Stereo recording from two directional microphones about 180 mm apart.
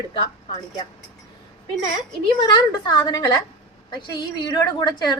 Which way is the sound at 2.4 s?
25° left (ahead or behind).